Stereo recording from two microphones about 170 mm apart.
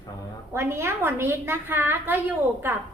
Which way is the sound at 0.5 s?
15° right (ahead or behind).